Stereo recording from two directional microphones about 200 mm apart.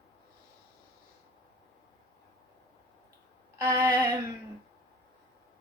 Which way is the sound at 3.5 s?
15° right (ahead or behind).